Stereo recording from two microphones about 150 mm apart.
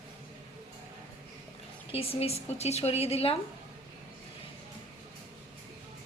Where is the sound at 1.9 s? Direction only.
40° left (ahead or behind).